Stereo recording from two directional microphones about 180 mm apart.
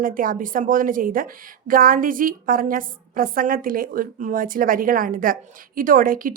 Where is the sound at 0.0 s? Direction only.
50° right (ahead or behind).